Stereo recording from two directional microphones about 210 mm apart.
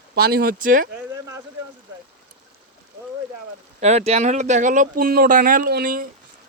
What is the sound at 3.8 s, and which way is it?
Speech, 30° right (ahead or behind).